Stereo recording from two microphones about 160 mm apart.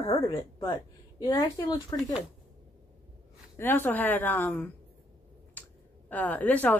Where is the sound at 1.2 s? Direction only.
25° left (ahead or behind).